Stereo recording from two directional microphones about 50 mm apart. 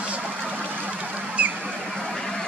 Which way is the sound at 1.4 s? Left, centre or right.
Right.